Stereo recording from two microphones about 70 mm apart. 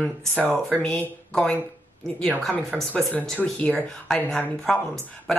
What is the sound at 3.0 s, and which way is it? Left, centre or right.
Speech, centre.